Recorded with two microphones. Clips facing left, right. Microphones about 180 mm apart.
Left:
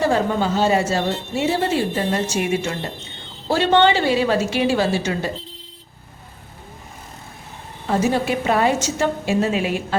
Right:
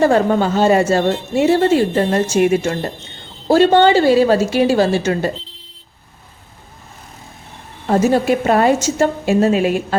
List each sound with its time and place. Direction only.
0.0 s a woman's voice: 50° right (ahead or behind)
7.9 s speech: 45° right (ahead or behind)